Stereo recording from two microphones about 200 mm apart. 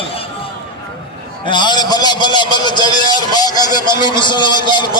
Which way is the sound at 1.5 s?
20° left (ahead or behind).